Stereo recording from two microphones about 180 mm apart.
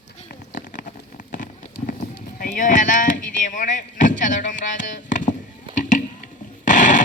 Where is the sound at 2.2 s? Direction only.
50° left (ahead or behind).